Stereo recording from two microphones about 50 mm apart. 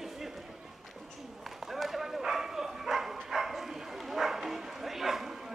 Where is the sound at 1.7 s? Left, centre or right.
Centre.